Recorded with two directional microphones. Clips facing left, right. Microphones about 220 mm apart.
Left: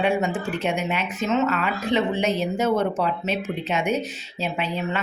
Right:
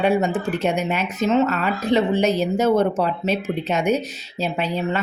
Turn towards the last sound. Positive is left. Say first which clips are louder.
# right 3 dB
turn(degrees=-40)  # may be behind; listen again after turning